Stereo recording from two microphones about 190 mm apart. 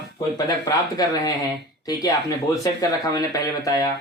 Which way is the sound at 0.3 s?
20° left (ahead or behind).